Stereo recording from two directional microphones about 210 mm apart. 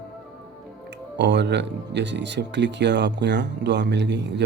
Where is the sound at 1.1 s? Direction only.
55° right (ahead or behind).